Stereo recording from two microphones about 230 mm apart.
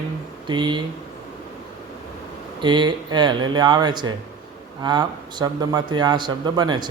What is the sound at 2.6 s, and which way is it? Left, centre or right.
Speech, centre.